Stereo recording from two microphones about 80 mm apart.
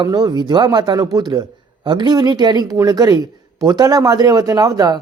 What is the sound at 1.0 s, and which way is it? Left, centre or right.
Speech, right.